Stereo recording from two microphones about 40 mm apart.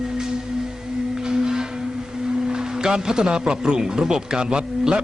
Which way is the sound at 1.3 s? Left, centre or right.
Centre.